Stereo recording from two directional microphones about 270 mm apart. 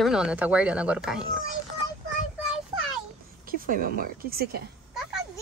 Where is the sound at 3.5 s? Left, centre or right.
Right.